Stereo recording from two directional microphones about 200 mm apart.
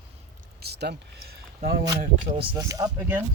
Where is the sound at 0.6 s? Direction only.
55° right (ahead or behind).